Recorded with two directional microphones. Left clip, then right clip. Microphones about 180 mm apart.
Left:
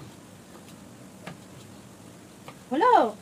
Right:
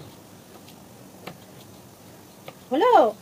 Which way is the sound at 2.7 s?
20° left (ahead or behind).